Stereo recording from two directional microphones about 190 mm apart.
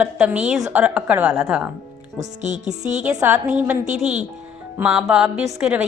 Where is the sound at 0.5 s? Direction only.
15° right (ahead or behind).